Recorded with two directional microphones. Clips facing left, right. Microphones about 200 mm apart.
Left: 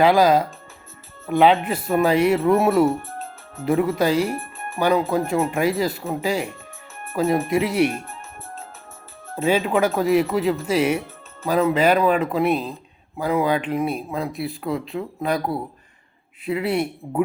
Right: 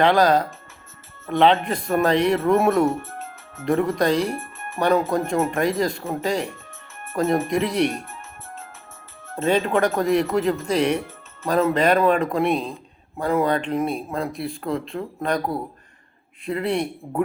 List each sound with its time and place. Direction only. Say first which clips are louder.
0.0 s speech: left 1 dB; 5° left (ahead or behind)
3.0 s music: left 1 dB; 35° left (ahead or behind)
3.7 s speech: left 1 dB; 5° left (ahead or behind)
9.3 s speech: even; 5° left (ahead or behind)